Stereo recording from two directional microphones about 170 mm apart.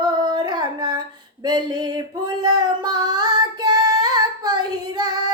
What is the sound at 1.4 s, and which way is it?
Child singing, 25° right (ahead or behind).